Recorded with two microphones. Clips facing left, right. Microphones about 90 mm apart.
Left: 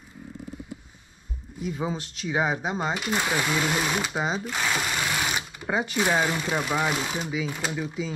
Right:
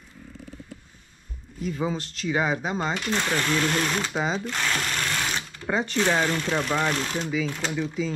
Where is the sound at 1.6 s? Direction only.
5° left (ahead or behind).